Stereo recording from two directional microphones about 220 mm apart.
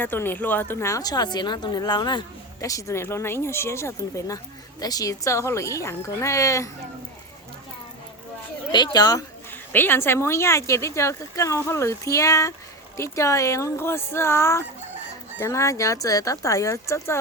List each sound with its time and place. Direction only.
0.0 s a woman's voice: 10° left (ahead or behind)
8.7 s a woman's voice: 20° left (ahead or behind)